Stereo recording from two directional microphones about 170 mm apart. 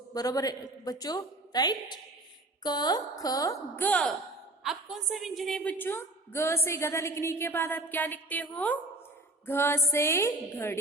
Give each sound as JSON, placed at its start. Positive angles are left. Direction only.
{"t": 0.1, "sound": "a woman's voice", "side_deg": 20}
{"t": 4.6, "sound": "a woman's voice", "side_deg": 0}